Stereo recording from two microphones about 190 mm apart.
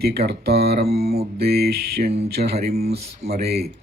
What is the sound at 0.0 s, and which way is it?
Speech, 55° right (ahead or behind).